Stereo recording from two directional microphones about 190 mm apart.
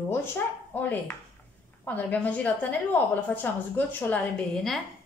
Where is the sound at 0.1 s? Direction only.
10° left (ahead or behind).